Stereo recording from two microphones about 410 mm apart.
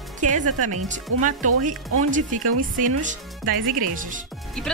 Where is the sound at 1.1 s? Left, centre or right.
Right.